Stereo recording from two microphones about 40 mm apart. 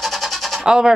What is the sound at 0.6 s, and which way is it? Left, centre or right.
Speech, centre.